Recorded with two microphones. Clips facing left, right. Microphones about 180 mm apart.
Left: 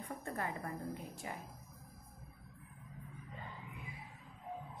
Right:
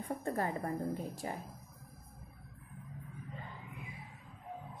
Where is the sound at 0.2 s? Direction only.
35° right (ahead or behind).